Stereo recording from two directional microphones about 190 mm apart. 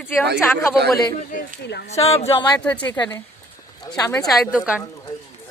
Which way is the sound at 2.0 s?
35° left (ahead or behind).